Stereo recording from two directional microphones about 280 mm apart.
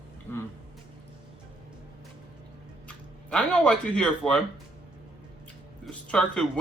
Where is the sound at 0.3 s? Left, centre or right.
Centre.